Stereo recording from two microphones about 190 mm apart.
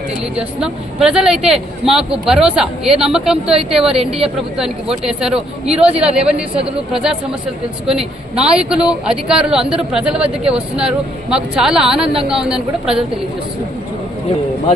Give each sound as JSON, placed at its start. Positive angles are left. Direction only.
{"t": 0.3, "sound": "speech", "side_deg": -5}
{"t": 5.0, "sound": "speech", "side_deg": -5}
{"t": 12.0, "sound": "speech", "side_deg": -30}
{"t": 12.3, "sound": "speech", "side_deg": -5}